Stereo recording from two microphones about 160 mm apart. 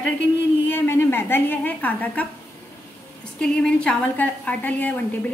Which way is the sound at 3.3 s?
5° left (ahead or behind).